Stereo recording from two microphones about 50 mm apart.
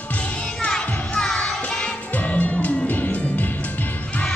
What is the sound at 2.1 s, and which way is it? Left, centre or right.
Music, left.